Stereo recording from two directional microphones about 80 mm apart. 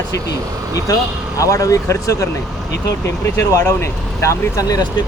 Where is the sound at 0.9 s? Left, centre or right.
Left.